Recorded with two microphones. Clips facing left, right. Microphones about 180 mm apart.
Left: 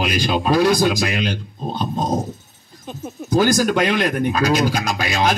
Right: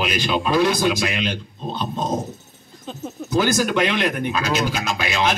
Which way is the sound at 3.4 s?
45° left (ahead or behind).